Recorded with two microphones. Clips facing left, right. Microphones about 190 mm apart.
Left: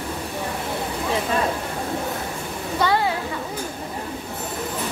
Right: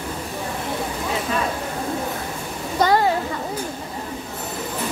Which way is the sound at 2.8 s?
40° right (ahead or behind).